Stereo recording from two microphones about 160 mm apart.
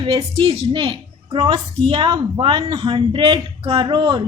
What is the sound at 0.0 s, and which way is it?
A woman's voice, 35° right (ahead or behind).